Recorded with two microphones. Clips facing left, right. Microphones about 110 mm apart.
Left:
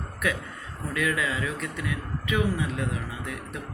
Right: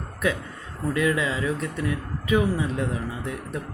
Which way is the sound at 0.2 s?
30° right (ahead or behind).